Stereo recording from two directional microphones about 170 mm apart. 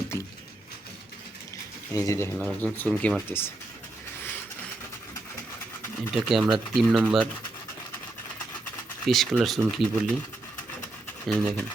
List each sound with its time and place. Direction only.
1.9 s speech: 15° left (ahead or behind)
2.4 s speech: 5° left (ahead or behind)
3.2 s speech: 15° left (ahead or behind)
6.1 s speech: centre (ahead or behind)
9.0 s speech: centre (ahead or behind)
11.3 s speech: 5° left (ahead or behind)